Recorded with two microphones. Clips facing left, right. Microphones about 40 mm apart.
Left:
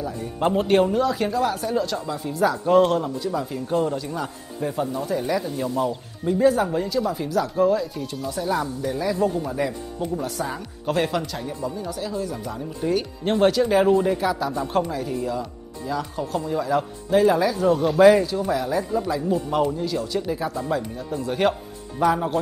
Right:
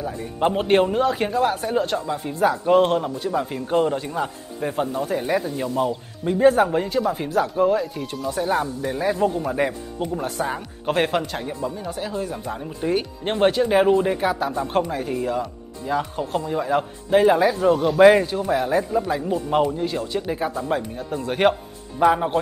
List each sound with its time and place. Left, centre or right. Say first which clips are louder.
0.6 s speech: even; right
6.4 s speech: right 4 dB; right
18.9 s speech: right 2 dB; right
19.7 s speech: right 1 dB; right
22.0 s speech: right 3 dB; right